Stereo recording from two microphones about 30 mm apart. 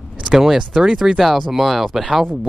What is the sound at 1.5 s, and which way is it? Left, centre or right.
Speech, centre.